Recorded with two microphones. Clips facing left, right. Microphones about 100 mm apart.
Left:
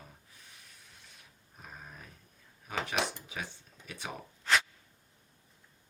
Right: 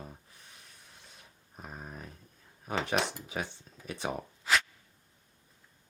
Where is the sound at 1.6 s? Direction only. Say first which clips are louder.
Right 5 dB; 30° right (ahead or behind).